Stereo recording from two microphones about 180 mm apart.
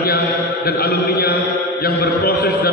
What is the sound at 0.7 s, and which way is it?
A man's voice, 60° left (ahead or behind).